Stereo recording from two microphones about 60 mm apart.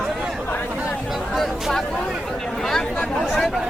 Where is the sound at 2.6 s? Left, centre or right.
Centre.